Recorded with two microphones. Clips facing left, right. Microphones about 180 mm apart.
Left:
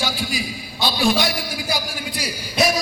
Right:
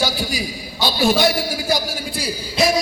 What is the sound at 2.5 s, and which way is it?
Hoot, 25° right (ahead or behind).